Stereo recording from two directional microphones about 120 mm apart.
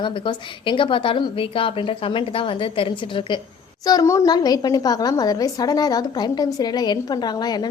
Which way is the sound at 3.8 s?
30° left (ahead or behind).